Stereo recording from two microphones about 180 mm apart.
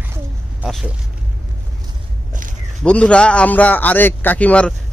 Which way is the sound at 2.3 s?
45° right (ahead or behind).